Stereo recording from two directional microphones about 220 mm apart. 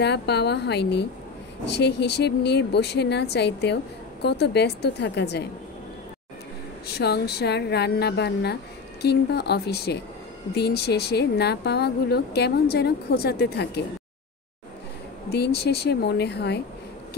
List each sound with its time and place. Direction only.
0.0 s a woman's voice: 50° left (ahead or behind)
7.0 s a woman's voice: 45° left (ahead or behind)
15.2 s a woman's voice: 50° left (ahead or behind)